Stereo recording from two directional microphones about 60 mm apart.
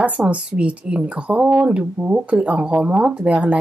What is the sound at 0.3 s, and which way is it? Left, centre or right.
Speech, centre.